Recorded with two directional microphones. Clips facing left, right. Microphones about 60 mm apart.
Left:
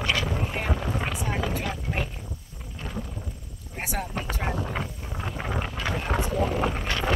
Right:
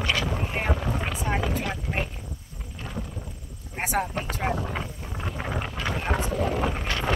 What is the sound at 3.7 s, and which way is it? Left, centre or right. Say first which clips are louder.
Vehicle: right 4 dB; right.